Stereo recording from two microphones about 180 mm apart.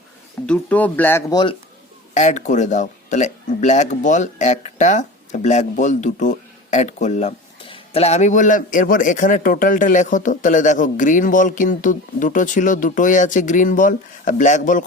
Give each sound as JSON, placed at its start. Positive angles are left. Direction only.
{"t": 0.4, "sound": "speech", "side_deg": 5}
{"t": 2.1, "sound": "speech", "side_deg": 40}